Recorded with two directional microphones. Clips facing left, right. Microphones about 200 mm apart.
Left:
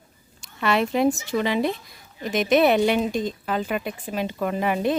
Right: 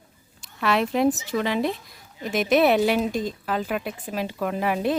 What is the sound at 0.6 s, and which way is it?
A woman's voice, centre (ahead or behind).